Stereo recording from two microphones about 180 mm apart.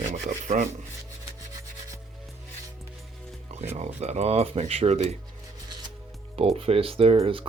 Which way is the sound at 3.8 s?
40° right (ahead or behind).